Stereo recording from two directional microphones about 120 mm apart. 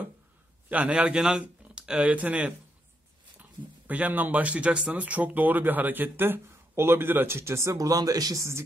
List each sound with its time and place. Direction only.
0.7 s speech: 10° right (ahead or behind)
3.8 s speech: 10° right (ahead or behind)